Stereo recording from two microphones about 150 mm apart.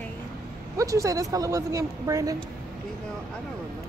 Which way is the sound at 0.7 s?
20° right (ahead or behind).